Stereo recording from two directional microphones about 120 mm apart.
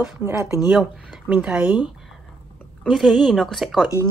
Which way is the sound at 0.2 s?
25° right (ahead or behind).